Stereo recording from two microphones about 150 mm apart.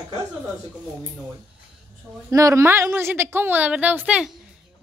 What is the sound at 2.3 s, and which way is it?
A woman's voice, 20° right (ahead or behind).